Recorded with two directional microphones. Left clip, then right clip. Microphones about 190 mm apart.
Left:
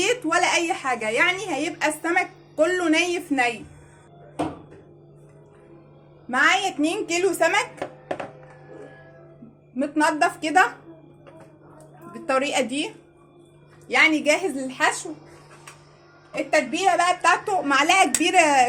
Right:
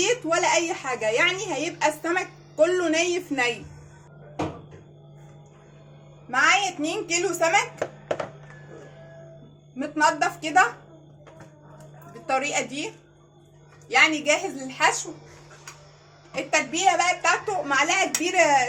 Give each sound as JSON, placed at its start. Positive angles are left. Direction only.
{"t": 0.0, "sound": "a woman's voice", "side_deg": 25}
{"t": 6.3, "sound": "a woman's voice", "side_deg": 50}
{"t": 9.7, "sound": "a woman's voice", "side_deg": 45}
{"t": 12.1, "sound": "a woman's voice", "side_deg": 50}
{"t": 16.7, "sound": "a woman's voice", "side_deg": 50}